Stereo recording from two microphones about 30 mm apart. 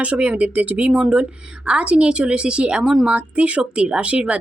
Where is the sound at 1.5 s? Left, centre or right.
Right.